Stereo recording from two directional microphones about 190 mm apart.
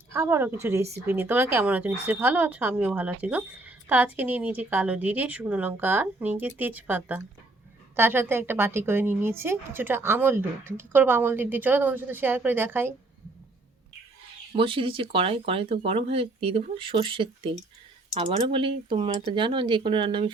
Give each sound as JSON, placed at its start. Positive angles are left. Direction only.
{"t": 0.1, "sound": "a woman's voice", "side_deg": -15}
{"t": 14.5, "sound": "speech", "side_deg": -30}